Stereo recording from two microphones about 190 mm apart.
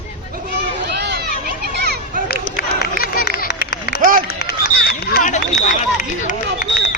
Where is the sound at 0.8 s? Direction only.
60° right (ahead or behind).